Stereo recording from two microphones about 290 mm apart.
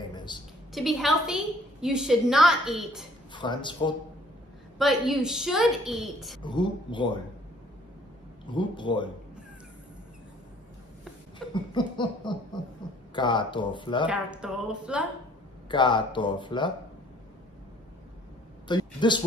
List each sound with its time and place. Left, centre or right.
0.1 s a sound: centre
0.7 s a woman's voice: centre
3.3 s laughter: centre
4.7 s a woman's voice: centre
6.4 s laughter: centre
8.5 s laughter: centre
11.3 s laughter: centre
14.0 s a woman's voice: centre
15.7 s laughter: centre
18.7 s speech: centre